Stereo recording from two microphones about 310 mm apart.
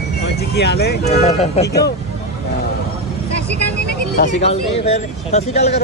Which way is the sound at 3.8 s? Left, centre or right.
Left.